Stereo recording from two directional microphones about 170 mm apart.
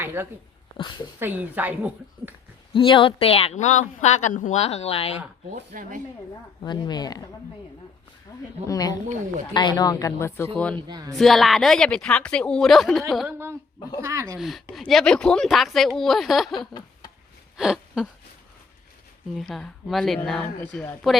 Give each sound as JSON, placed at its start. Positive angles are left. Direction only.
{"t": 0.0, "sound": "a sound", "side_deg": -15}
{"t": 1.2, "sound": "a woman's voice", "side_deg": -10}
{"t": 2.7, "sound": "a woman's voice", "side_deg": 30}
{"t": 5.7, "sound": "speech", "side_deg": -50}
{"t": 6.6, "sound": "speech", "side_deg": 25}
{"t": 8.6, "sound": "speech", "side_deg": 20}
{"t": 10.8, "sound": "speech", "side_deg": -25}
{"t": 11.2, "sound": "speech", "side_deg": 0}
{"t": 13.2, "sound": "a woman's voice", "side_deg": -15}
{"t": 14.3, "sound": "speech", "side_deg": 0}
{"t": 16.6, "sound": "a sound", "side_deg": 25}
{"t": 17.6, "sound": "a sound", "side_deg": -5}
{"t": 19.4, "sound": "speech", "side_deg": 0}